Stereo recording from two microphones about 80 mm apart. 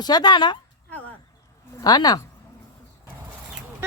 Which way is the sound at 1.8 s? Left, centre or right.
Left.